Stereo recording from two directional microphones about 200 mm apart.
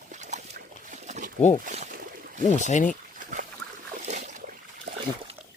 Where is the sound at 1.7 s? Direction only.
40° right (ahead or behind).